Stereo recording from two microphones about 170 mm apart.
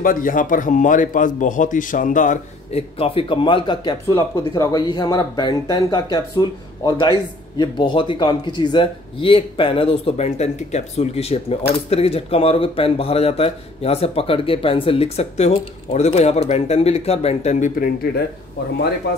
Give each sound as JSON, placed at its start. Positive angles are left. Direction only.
{"t": 0.0, "sound": "speech", "side_deg": 55}
{"t": 3.0, "sound": "speech", "side_deg": 30}